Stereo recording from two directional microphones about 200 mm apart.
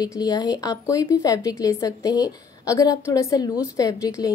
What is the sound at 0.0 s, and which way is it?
A woman's voice, 20° left (ahead or behind).